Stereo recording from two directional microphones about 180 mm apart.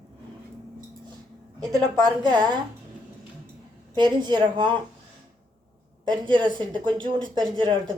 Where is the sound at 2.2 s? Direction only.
25° right (ahead or behind).